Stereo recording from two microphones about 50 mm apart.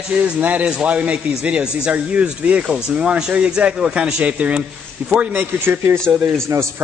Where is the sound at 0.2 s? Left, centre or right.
Right.